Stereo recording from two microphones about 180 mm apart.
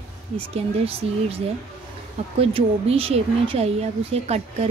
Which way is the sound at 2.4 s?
30° right (ahead or behind).